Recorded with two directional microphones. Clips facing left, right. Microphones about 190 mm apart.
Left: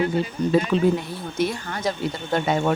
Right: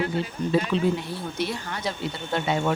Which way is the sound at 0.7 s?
45° left (ahead or behind).